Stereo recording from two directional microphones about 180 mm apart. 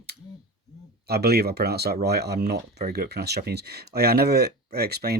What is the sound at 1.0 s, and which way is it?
Speech, 60° right (ahead or behind).